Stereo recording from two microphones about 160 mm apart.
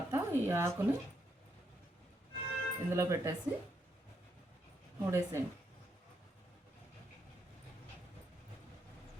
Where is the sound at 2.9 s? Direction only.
15° right (ahead or behind).